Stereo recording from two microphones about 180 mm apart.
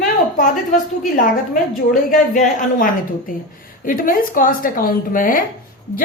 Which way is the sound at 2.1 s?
45° left (ahead or behind).